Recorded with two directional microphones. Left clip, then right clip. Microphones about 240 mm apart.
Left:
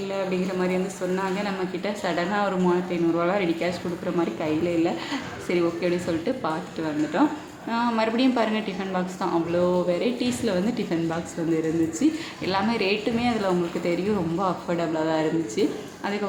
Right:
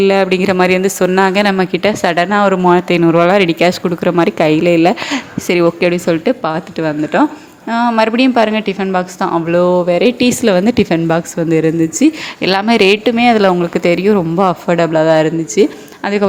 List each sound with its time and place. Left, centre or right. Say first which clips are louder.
0.1 s a woman's voice: right 15 dB; right